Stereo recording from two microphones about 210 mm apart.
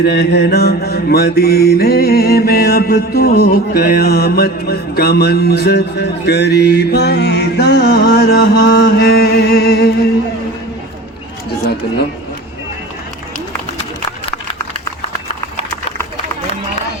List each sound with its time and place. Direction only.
0.0 s mantra: 50° left (ahead or behind)